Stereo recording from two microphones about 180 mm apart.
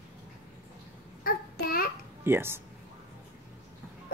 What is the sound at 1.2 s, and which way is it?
Child singing, 55° left (ahead or behind).